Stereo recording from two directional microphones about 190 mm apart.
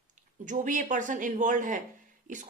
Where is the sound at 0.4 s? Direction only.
40° right (ahead or behind).